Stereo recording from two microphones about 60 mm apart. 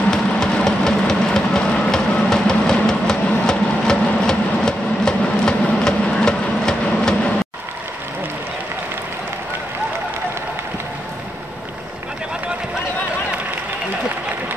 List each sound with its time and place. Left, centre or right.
0.1 s vehicle: centre